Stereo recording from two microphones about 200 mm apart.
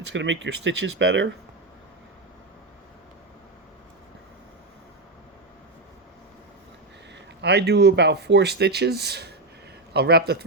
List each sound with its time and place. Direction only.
0.1 s speech: 65° right (ahead or behind)
7.4 s speech: 55° right (ahead or behind)